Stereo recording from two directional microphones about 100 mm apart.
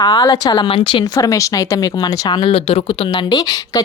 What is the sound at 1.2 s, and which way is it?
Speech, 35° left (ahead or behind).